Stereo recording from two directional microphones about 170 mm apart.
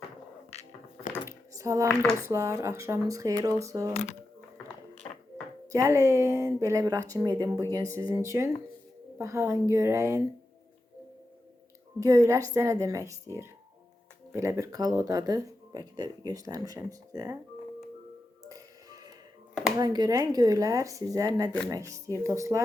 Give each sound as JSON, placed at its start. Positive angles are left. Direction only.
{"t": 1.2, "sound": "a sound", "side_deg": -20}
{"t": 2.2, "sound": "speech", "side_deg": -15}
{"t": 3.9, "sound": "speech", "side_deg": 45}
{"t": 5.7, "sound": "speech", "side_deg": -20}
{"t": 11.9, "sound": "speech", "side_deg": -20}
{"t": 18.4, "sound": "music", "side_deg": -20}
{"t": 19.7, "sound": "speech", "side_deg": -25}